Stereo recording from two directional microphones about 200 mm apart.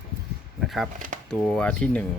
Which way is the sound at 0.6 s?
Centre (ahead or behind).